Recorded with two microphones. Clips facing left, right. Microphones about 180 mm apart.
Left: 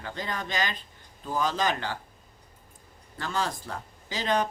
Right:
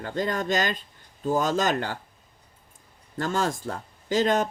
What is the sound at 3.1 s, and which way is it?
Speech, 45° right (ahead or behind).